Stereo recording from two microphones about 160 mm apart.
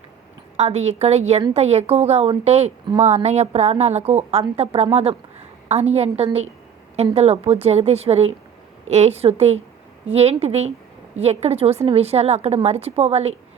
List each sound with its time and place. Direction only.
0.5 s a woman's voice: 45° right (ahead or behind)